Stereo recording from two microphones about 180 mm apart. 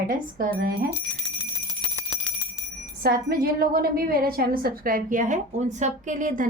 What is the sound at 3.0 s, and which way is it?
A woman's voice, 55° right (ahead or behind).